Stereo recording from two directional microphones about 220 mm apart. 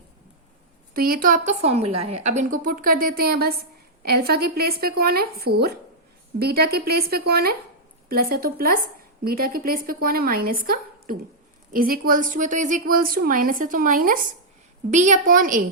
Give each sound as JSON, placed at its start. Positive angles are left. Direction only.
{"t": 0.9, "sound": "a woman's voice", "side_deg": -40}